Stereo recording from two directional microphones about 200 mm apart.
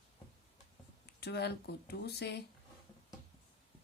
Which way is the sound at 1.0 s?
55° left (ahead or behind).